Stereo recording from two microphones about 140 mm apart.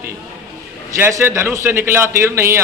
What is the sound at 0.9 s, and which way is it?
A man's voice, 15° right (ahead or behind).